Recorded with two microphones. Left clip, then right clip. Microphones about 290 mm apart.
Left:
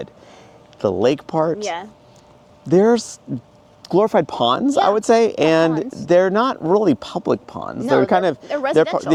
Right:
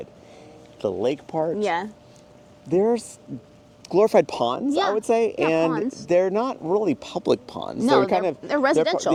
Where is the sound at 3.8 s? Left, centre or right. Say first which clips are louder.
Left 3 dB; left.